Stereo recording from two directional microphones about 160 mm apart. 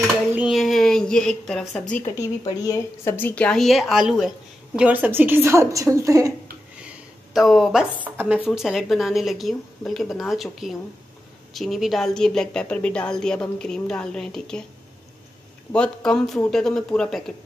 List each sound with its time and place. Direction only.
0.4 s a woman's voice: centre (ahead or behind)
2.1 s a woman's voice: 20° left (ahead or behind); by 6.3 s 20° right (ahead or behind)
7.3 s speech: centre (ahead or behind)
15.7 s speech: 5° left (ahead or behind)